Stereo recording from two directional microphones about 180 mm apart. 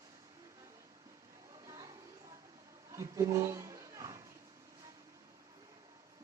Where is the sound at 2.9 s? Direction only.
15° right (ahead or behind).